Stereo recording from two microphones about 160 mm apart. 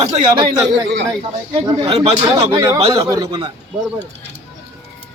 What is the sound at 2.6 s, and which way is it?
Speech, 20° right (ahead or behind).